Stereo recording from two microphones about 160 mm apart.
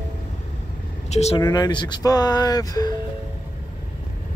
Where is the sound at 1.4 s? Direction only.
25° left (ahead or behind).